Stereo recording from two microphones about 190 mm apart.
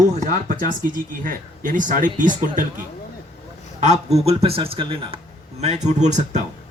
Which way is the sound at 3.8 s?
35° right (ahead or behind).